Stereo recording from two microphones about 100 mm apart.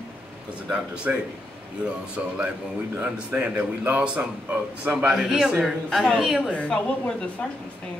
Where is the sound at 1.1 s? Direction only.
15° right (ahead or behind).